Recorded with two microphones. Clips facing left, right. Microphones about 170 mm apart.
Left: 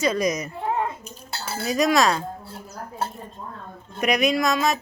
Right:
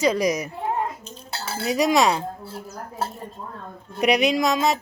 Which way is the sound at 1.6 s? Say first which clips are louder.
Right 1 dB; 15° right (ahead or behind).